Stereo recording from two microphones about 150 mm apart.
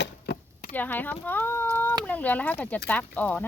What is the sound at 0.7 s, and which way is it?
Speech, 10° left (ahead or behind).